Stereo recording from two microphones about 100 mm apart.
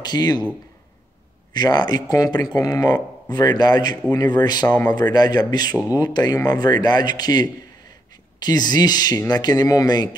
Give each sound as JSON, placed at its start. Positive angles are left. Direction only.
{"t": 0.0, "sound": "speech", "side_deg": 40}
{"t": 1.5, "sound": "speech", "side_deg": 45}